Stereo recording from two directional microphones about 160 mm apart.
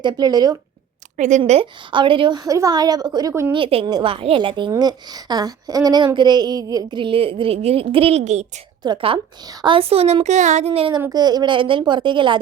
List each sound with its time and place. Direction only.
0.0 s speech: 25° right (ahead or behind)
1.1 s speech: 50° right (ahead or behind)
1.4 s speech: 35° right (ahead or behind); by 3.5 s 20° right (ahead or behind)
3.5 s a woman's voice: 35° right (ahead or behind)
8.8 s a woman's voice: 30° right (ahead or behind)
11.1 s speech: 25° right (ahead or behind)